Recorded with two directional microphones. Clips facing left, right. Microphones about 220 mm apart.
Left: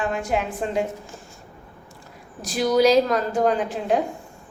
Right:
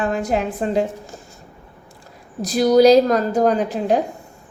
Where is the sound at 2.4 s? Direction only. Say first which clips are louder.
Right 6 dB; 40° right (ahead or behind).